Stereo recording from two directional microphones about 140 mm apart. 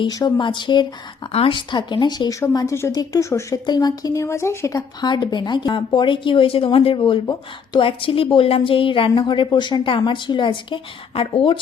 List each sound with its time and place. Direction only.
0.0 s speech: 30° left (ahead or behind)